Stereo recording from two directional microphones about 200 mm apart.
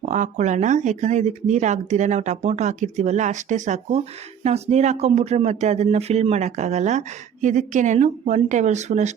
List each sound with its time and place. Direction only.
0.0 s speech: 35° right (ahead or behind)